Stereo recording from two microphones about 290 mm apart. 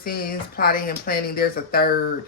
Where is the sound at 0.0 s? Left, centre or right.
Left.